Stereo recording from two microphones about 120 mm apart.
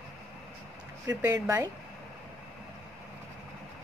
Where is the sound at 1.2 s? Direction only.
20° right (ahead or behind).